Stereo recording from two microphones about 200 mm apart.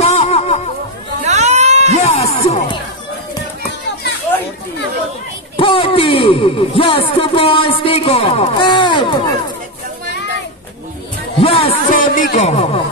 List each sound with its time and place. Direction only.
0.0 s music: 30° left (ahead or behind)
1.2 s a sound: 35° right (ahead or behind)
2.0 s music: 30° left (ahead or behind)
5.6 s speech: 25° left (ahead or behind)
11.4 s speech: 30° left (ahead or behind)
11.9 s a man's voice: 45° left (ahead or behind)